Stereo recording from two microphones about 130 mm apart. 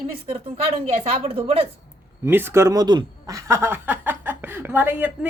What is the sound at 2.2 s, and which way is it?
Speech, 15° right (ahead or behind).